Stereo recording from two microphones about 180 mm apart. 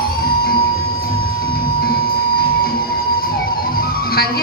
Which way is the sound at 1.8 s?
55° left (ahead or behind).